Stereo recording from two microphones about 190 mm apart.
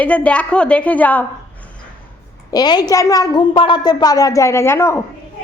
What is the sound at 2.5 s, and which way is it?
A woman's voice, 20° left (ahead or behind).